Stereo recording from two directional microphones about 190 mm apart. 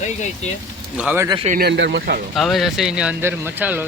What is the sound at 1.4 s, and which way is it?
Speech, 55° right (ahead or behind).